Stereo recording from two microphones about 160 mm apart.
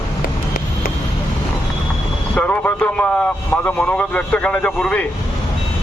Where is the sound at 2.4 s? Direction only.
10° left (ahead or behind).